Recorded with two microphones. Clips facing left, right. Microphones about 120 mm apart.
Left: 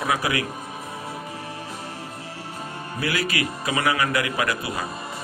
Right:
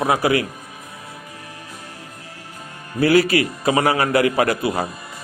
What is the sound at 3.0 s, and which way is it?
A man's voice, 35° right (ahead or behind).